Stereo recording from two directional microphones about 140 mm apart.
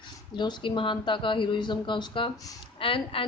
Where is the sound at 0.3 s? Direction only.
30° left (ahead or behind).